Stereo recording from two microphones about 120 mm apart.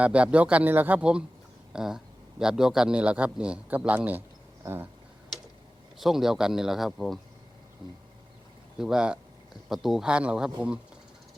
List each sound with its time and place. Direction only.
0.0 s a man's voice: 10° right (ahead or behind)
6.0 s speech: 5° right (ahead or behind)
8.8 s speech: 5° right (ahead or behind)